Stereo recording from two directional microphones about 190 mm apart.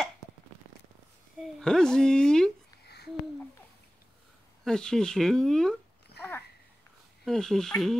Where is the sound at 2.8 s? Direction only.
60° left (ahead or behind).